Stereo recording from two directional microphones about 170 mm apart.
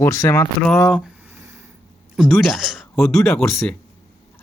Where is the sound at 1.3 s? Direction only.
20° right (ahead or behind).